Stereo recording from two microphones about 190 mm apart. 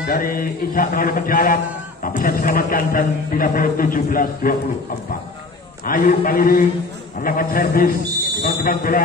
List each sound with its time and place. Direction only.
0.0 s a man's voice: 50° left (ahead or behind)
5.9 s a man's voice: 50° left (ahead or behind)